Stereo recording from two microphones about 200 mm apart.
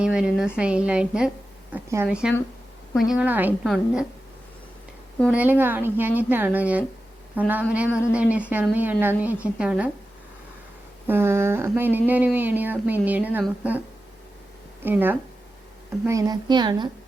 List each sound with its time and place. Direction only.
0.0 s a woman's voice: 5° right (ahead or behind)
5.3 s a woman's voice: 10° right (ahead or behind)
11.0 s a woman's voice: 10° right (ahead or behind)
14.8 s a woman's voice: 10° right (ahead or behind)